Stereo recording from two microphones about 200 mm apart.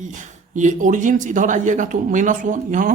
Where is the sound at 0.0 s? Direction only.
40° right (ahead or behind).